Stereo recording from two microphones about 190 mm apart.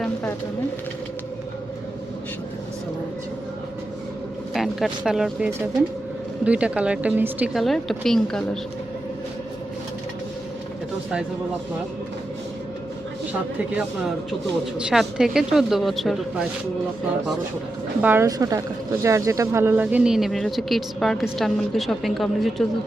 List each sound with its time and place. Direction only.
4.5 s speech: centre (ahead or behind)
14.8 s speech: 5° right (ahead or behind)
18.0 s a woman's voice: 10° right (ahead or behind)